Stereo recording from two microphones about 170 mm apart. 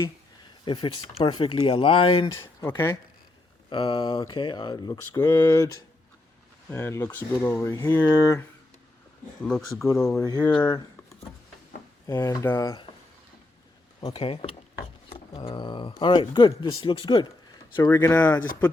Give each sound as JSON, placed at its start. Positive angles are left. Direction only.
{"t": 0.6, "sound": "speech", "side_deg": 30}
{"t": 2.6, "sound": "speech", "side_deg": 15}
{"t": 5.1, "sound": "speech", "side_deg": 15}
{"t": 6.7, "sound": "speech", "side_deg": 15}
{"t": 9.4, "sound": "speech", "side_deg": 5}
{"t": 9.8, "sound": "speech", "side_deg": 15}
{"t": 10.4, "sound": "speech", "side_deg": 10}
{"t": 12.0, "sound": "speech", "side_deg": 15}
{"t": 14.0, "sound": "speech", "side_deg": 30}
{"t": 17.8, "sound": "speech", "side_deg": 15}